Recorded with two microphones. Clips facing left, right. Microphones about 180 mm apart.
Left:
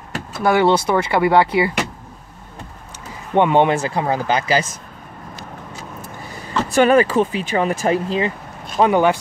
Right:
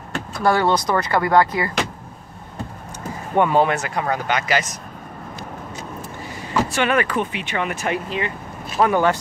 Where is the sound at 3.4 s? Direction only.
25° left (ahead or behind).